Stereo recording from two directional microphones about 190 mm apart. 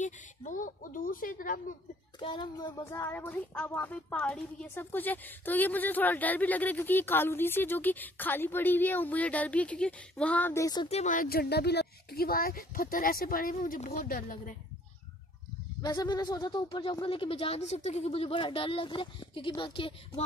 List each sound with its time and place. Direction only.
0.0 s speech: 40° left (ahead or behind)
2.1 s a child's voice: 25° left (ahead or behind)
10.9 s speech: 40° left (ahead or behind)
15.8 s speech: 20° left (ahead or behind)